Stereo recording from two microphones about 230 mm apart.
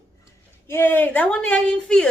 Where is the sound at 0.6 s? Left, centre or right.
Centre.